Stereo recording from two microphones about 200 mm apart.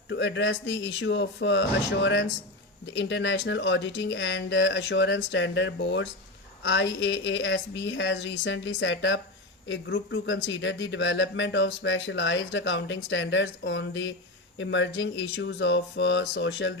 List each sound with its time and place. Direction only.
0.1 s speech: 65° left (ahead or behind)